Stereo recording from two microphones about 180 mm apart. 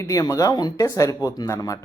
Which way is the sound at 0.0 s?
20° left (ahead or behind).